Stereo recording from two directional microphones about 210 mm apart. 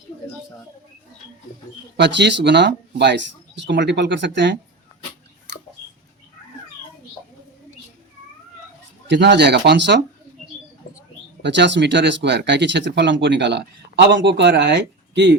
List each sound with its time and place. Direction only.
2.0 s speech: 55° right (ahead or behind)
9.0 s speech: 55° right (ahead or behind)
11.4 s speech: 55° right (ahead or behind)